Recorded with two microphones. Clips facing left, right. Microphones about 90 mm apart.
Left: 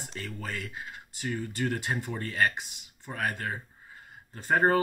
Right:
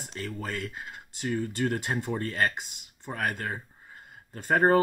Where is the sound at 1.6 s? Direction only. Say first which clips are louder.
Right 2 dB; 25° right (ahead or behind).